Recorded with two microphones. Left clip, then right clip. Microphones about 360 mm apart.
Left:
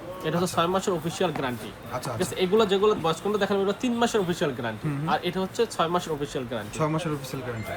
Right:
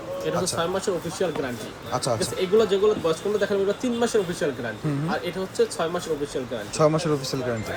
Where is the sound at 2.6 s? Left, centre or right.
Left.